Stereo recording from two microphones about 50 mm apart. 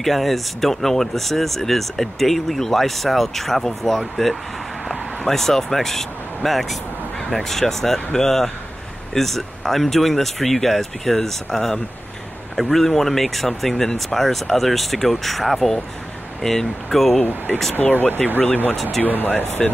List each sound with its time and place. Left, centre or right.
0.0 s speech: centre
17.2 s speech: left